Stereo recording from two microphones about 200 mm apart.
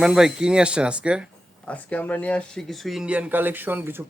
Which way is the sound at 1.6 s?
5° left (ahead or behind).